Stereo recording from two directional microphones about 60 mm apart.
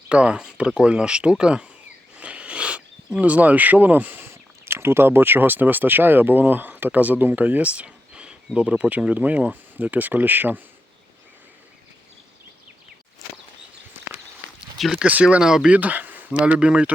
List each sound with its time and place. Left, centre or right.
0.1 s speech: centre
2.1 s a sound: centre
3.2 s speech: right
4.6 s speech: right
14.9 s speech: centre
15.4 s speech: centre
15.7 s speech: right
16.5 s speech: centre